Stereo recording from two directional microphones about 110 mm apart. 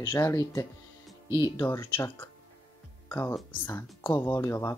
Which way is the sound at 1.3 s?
40° left (ahead or behind).